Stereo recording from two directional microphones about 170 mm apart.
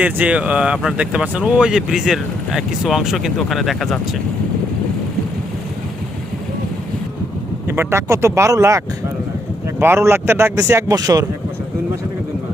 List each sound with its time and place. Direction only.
0.0 s speech: 10° right (ahead or behind)
7.7 s a man's voice: 15° right (ahead or behind)